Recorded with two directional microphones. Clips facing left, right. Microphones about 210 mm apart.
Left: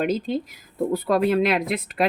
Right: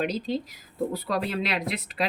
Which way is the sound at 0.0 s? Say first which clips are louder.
Left 4 dB; 50° left (ahead or behind).